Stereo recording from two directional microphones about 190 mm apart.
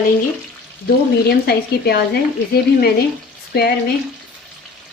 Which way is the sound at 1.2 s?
55° left (ahead or behind).